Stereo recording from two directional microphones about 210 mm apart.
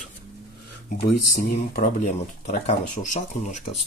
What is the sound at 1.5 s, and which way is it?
Speech, 40° left (ahead or behind).